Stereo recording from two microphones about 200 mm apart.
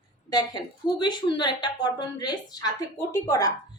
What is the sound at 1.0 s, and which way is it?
A woman's voice, 20° left (ahead or behind).